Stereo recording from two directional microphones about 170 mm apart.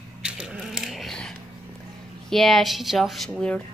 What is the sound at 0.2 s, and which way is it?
Sheep, 5° right (ahead or behind).